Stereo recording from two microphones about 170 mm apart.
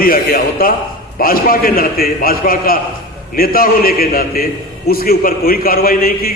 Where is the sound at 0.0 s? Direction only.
55° left (ahead or behind).